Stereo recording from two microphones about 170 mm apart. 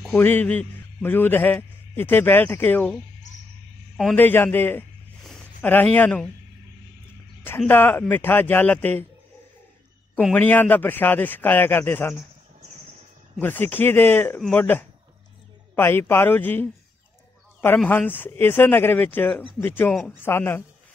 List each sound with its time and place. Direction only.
0.0 s a man's voice: 5° left (ahead or behind)
7.4 s speech: 15° left (ahead or behind)
10.3 s speech: 10° left (ahead or behind)
13.4 s speech: 10° left (ahead or behind)